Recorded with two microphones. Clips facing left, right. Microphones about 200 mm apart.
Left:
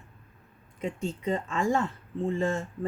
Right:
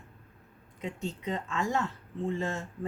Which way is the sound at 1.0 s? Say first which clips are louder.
Left 4 dB; 50° left (ahead or behind).